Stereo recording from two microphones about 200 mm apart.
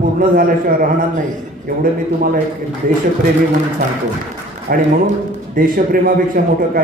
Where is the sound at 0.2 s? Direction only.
45° right (ahead or behind).